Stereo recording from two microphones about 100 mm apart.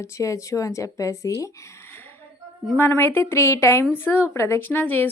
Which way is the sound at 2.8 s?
20° left (ahead or behind).